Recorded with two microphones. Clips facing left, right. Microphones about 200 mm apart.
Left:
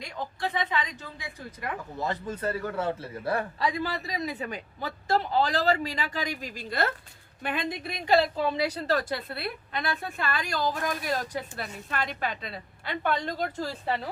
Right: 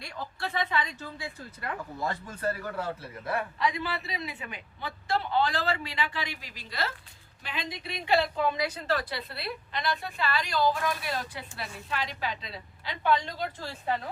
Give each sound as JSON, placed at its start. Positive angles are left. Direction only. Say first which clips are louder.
{"t": 0.0, "sound": "a woman's voice", "louder": "left 4 dB", "side_deg": 15}